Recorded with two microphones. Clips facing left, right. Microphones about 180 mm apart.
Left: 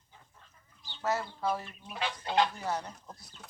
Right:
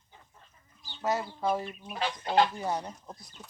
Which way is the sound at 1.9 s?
40° right (ahead or behind).